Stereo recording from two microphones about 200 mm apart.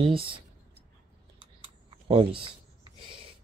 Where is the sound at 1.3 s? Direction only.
25° right (ahead or behind).